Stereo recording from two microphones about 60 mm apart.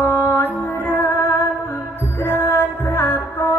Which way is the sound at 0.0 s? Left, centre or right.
Left.